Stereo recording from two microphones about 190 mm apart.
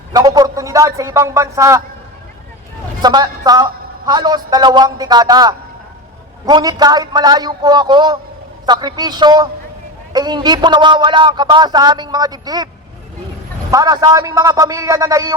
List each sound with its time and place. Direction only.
0.1 s a man's voice: 20° right (ahead or behind)
3.0 s a man's voice: 20° right (ahead or behind)
13.7 s a man's voice: 20° right (ahead or behind)